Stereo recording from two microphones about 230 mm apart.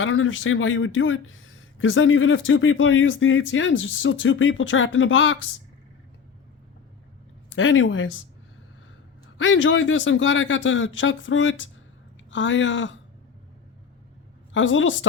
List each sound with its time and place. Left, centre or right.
0.0 s speech: left
7.5 s speech: left
9.4 s speech: left
14.5 s speech: left